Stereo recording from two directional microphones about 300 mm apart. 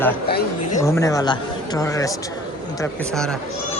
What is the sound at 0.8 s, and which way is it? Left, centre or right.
Speech, centre.